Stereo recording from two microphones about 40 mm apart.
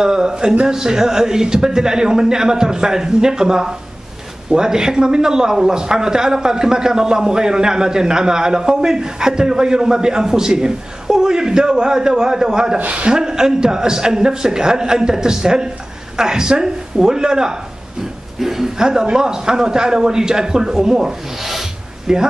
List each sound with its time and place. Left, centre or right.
0.0 s speech: centre
12.7 s a man's voice: right
13.2 s speech: centre
21.4 s rub: centre
22.0 s speech: centre